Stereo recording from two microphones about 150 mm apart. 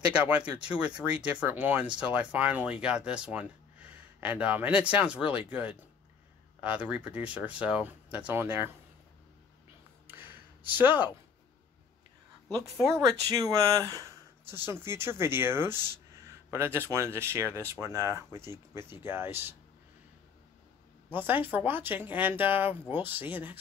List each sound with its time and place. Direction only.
0.1 s speech: 10° right (ahead or behind)
10.8 s speech: 10° right (ahead or behind)
12.4 s speech: 5° left (ahead or behind)
13.3 s speech: 25° right (ahead or behind)
21.3 s speech: 10° right (ahead or behind)